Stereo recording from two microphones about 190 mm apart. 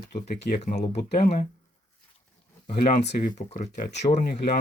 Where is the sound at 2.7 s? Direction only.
40° left (ahead or behind).